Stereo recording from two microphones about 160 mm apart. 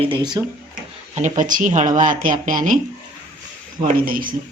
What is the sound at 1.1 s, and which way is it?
Speech, 50° right (ahead or behind).